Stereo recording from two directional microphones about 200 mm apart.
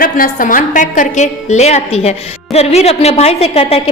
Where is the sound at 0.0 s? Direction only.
45° left (ahead or behind).